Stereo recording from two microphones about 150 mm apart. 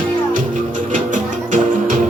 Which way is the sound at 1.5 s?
60° right (ahead or behind).